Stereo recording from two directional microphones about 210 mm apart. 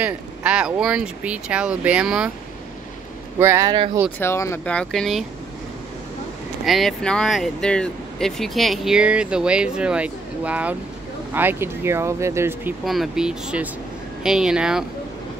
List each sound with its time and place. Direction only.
0.0 s speech: 5° right (ahead or behind)
3.3 s speech: 10° right (ahead or behind)
4.2 s speech: 15° left (ahead or behind)
6.6 s speech: centre (ahead or behind)